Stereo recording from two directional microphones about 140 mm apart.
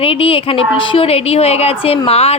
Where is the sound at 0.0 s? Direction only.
40° left (ahead or behind).